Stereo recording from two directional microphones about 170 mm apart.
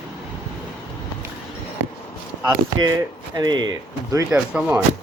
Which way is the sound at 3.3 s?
25° right (ahead or behind).